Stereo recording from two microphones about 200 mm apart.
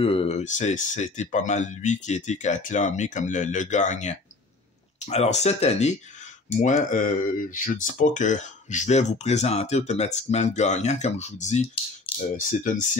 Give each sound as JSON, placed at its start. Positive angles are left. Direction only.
{"t": 0.0, "sound": "speech", "side_deg": 30}